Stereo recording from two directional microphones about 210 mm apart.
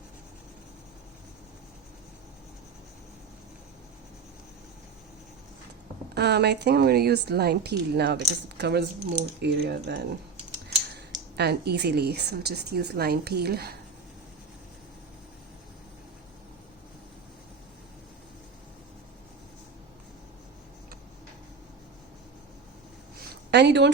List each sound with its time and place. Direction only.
6.1 s speech: 50° right (ahead or behind)
11.1 s speech: 50° right (ahead or behind)
23.3 s a sound: 55° right (ahead or behind)